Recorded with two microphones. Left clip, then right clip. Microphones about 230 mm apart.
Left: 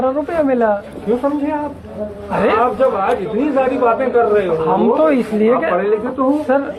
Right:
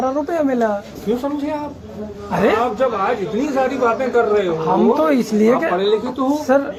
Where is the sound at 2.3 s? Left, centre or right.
Right.